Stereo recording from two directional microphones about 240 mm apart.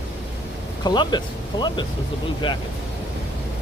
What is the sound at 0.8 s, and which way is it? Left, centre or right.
Speech, centre.